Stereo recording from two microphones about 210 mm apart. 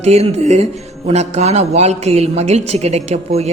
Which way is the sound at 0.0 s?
30° right (ahead or behind).